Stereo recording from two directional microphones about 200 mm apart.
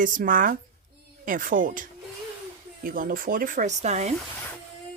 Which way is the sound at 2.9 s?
45° right (ahead or behind).